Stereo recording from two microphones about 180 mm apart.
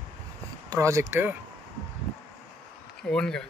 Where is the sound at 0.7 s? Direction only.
15° right (ahead or behind).